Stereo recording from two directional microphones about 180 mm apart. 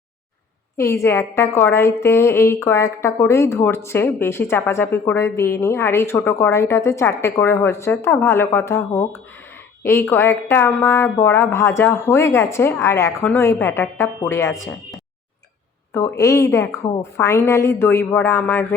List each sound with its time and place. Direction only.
0.8 s a woman's voice: 15° left (ahead or behind)
15.9 s a woman's voice: 15° left (ahead or behind)